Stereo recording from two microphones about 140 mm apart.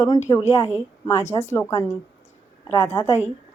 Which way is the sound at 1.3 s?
20° left (ahead or behind).